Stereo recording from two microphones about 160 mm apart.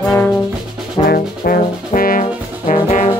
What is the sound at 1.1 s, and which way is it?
Brass instrument, 65° left (ahead or behind).